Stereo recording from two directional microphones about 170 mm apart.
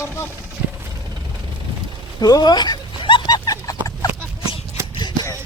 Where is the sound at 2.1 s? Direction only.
25° left (ahead or behind).